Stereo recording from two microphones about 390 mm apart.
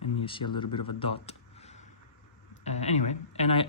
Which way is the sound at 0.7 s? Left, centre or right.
Left.